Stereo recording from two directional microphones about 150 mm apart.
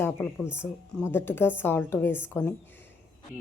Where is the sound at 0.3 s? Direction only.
5° right (ahead or behind).